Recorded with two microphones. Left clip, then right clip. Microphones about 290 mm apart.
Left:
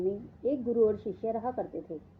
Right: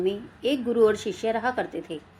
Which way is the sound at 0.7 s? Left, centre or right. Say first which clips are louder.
Right 6 dB; right.